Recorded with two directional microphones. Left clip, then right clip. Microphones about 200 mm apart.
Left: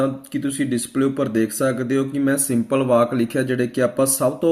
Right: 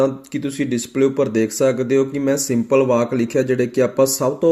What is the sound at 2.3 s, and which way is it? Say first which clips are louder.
A man's voice: right 4 dB; 10° right (ahead or behind).